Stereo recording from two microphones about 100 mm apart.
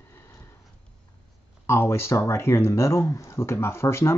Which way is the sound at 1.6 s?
25° left (ahead or behind).